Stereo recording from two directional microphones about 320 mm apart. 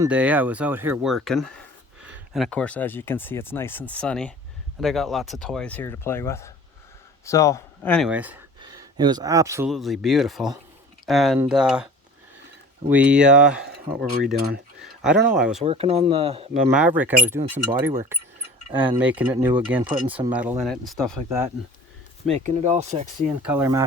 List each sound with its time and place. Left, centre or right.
0.0 s speech: centre
12.9 s speech: centre
13.7 s speech: right
14.8 s speech: centre
15.6 s speech: centre
16.7 s speech: centre
22.3 s speech: right
23.4 s speech: centre